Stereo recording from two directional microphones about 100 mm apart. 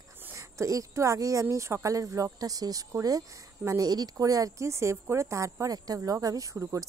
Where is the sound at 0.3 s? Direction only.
30° right (ahead or behind).